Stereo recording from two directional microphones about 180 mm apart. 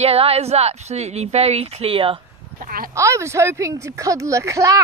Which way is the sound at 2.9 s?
15° right (ahead or behind).